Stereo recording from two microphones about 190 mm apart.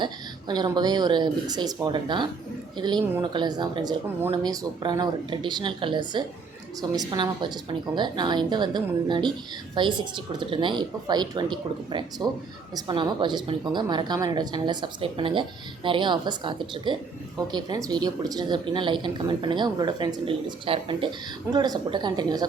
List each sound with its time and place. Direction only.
0.0 s a woman's voice: 25° right (ahead or behind)